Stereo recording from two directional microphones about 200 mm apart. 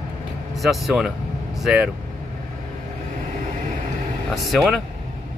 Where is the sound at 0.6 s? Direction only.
Centre (ahead or behind).